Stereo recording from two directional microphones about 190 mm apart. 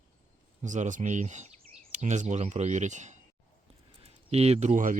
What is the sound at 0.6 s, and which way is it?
Speech, 40° right (ahead or behind).